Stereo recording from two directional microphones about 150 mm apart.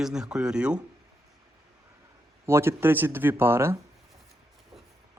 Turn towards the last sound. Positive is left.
turn(degrees=-15)  # may be behind; listen again after turning